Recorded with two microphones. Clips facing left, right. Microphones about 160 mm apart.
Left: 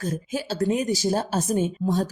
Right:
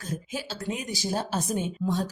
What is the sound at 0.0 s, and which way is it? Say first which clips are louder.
Speech: left 6 dB; 45° left (ahead or behind).